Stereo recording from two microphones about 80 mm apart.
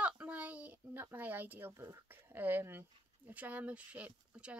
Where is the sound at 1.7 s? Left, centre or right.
Right.